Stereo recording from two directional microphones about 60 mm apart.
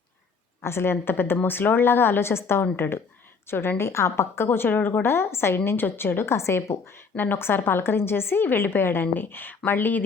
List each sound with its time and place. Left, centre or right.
0.6 s a woman's voice: left
4.4 s a woman's voice: left
7.2 s a woman's voice: left